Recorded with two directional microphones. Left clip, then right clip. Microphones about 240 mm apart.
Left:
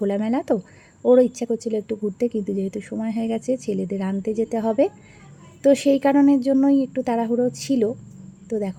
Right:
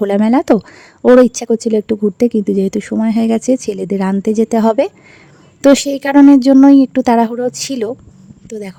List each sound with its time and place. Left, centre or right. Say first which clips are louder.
0.0 s speech: right 10 dB; right